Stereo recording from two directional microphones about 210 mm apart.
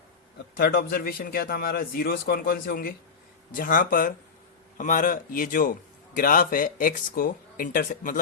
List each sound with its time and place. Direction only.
0.5 s a man's voice: 45° left (ahead or behind)